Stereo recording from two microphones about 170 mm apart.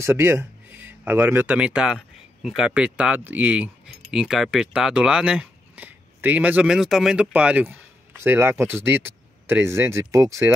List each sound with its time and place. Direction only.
0.0 s speech: 15° right (ahead or behind)